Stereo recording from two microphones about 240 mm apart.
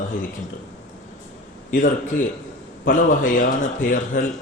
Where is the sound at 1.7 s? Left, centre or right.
Left.